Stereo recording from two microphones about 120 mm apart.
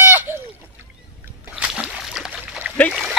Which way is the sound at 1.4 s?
10° right (ahead or behind).